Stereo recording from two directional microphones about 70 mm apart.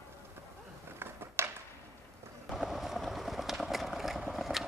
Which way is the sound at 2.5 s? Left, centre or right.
Centre.